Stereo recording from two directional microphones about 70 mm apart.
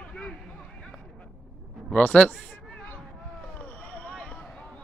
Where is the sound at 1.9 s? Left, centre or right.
Centre.